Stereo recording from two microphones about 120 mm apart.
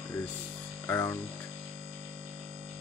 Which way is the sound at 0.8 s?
25° left (ahead or behind).